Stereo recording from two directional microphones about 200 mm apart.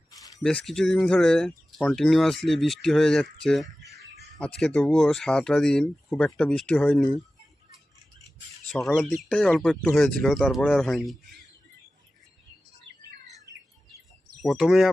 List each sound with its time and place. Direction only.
0.1 s a sound: 15° left (ahead or behind)
0.4 s speech: centre (ahead or behind)
8.6 s speech: 5° left (ahead or behind)
14.4 s speech: centre (ahead or behind)